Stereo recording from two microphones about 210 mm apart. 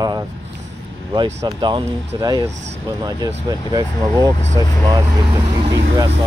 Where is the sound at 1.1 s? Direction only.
20° right (ahead or behind).